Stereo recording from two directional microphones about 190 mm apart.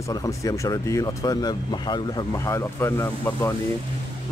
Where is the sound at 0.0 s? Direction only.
15° left (ahead or behind).